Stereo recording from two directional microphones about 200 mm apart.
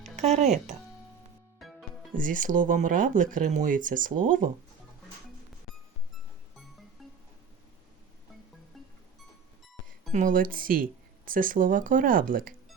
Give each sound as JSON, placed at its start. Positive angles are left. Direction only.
{"t": 0.0, "sound": "music", "side_deg": -35}
{"t": 2.1, "sound": "speech", "side_deg": -40}
{"t": 7.0, "sound": "music", "side_deg": 0}
{"t": 10.1, "sound": "speech", "side_deg": -40}